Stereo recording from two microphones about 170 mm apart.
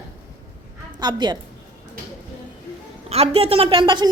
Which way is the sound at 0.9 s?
25° right (ahead or behind).